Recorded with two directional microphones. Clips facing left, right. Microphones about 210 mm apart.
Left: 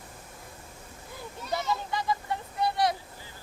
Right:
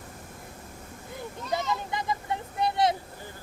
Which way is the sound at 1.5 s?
20° right (ahead or behind).